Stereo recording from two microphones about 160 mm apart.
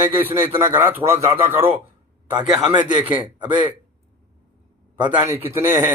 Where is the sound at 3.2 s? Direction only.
30° right (ahead or behind).